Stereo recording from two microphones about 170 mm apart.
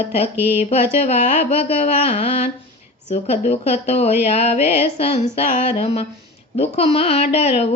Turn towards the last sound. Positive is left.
turn(degrees=40)  # may be behind; listen again after turning